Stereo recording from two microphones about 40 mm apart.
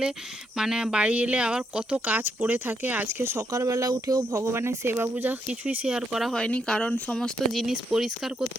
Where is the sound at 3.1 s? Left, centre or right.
Right.